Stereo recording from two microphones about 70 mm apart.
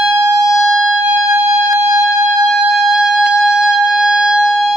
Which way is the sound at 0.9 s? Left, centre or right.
Centre.